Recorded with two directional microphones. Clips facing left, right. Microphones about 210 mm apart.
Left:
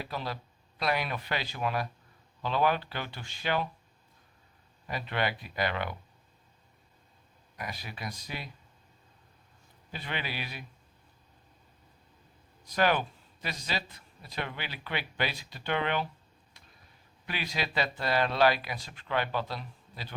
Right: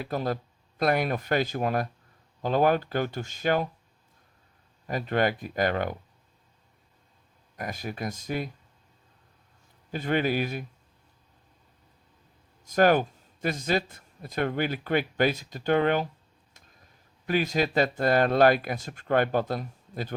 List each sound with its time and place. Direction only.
0.0 s speech: 50° right (ahead or behind)
4.9 s speech: 45° right (ahead or behind)
7.5 s speech: 45° right (ahead or behind)
9.9 s speech: 45° right (ahead or behind)
12.6 s speech: 45° right (ahead or behind)